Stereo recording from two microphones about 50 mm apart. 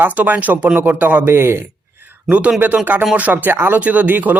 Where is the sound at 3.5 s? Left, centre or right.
Right.